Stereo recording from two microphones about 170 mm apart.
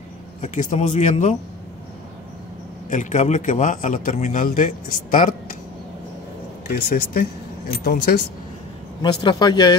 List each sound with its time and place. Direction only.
0.4 s a man's voice: 45° left (ahead or behind)
2.9 s a man's voice: 50° left (ahead or behind)
6.7 s speech: 60° left (ahead or behind)
9.2 s speech: 25° left (ahead or behind)